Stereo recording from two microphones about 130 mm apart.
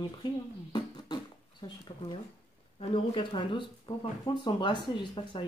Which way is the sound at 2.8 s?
40° left (ahead or behind).